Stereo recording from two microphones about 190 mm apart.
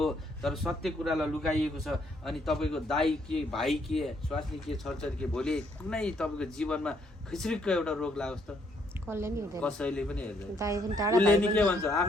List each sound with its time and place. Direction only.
0.0 s a man's voice: centre (ahead or behind)
9.0 s speech: 15° right (ahead or behind)
9.6 s a man's voice: 5° left (ahead or behind)
10.6 s speech: 15° right (ahead or behind)
11.5 s a man's voice: 15° left (ahead or behind)